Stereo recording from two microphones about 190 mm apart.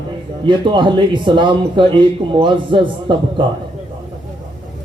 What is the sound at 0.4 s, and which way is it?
Speech, 25° right (ahead or behind).